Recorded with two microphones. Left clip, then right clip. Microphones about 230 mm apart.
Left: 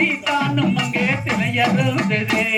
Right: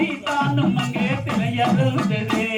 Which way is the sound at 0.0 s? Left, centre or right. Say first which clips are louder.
Left 3 dB; left.